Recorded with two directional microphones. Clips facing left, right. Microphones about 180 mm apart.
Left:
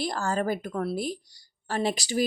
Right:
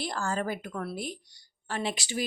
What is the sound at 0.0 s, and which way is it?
Speech, 40° left (ahead or behind).